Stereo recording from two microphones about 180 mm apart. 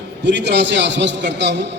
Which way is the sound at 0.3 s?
75° right (ahead or behind).